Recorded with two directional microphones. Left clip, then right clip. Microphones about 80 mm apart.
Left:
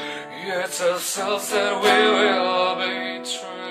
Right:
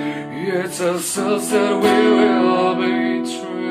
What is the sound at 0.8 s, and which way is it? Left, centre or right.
Music, centre.